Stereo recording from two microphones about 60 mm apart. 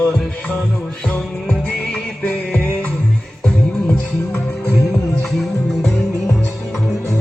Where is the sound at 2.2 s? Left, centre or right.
Left.